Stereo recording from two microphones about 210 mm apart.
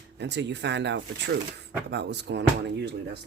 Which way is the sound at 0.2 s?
55° right (ahead or behind).